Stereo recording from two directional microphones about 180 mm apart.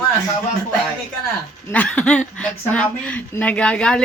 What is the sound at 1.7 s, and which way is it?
Speech, 10° left (ahead or behind).